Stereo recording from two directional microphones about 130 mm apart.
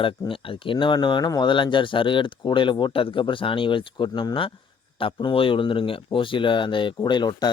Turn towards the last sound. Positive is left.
turn(degrees=35)  # may be behind; listen again after turning